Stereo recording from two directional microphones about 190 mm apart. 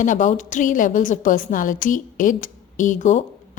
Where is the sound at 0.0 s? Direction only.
40° left (ahead or behind).